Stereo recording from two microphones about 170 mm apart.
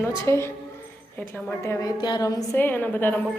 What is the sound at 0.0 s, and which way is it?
A woman's voice, 15° left (ahead or behind).